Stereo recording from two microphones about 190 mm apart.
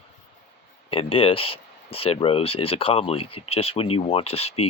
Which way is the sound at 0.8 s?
30° left (ahead or behind).